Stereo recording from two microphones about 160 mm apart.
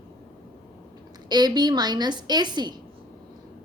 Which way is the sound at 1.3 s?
25° right (ahead or behind).